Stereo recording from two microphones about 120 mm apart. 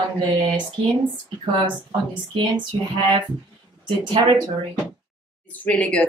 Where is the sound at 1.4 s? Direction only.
45° right (ahead or behind).